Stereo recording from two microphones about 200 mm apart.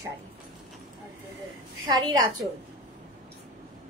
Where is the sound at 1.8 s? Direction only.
20° right (ahead or behind).